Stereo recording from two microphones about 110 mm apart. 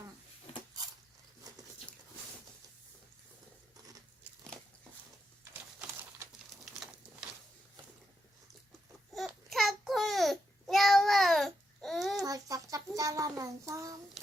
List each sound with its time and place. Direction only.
9.1 s babbling: centre (ahead or behind)
12.2 s a sound: 35° right (ahead or behind)
13.0 s child singing: 30° right (ahead or behind)